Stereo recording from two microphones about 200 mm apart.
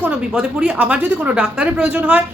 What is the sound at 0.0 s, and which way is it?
A woman's voice, 5° right (ahead or behind).